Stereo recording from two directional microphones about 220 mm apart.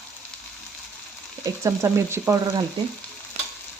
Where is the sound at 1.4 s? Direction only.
15° right (ahead or behind).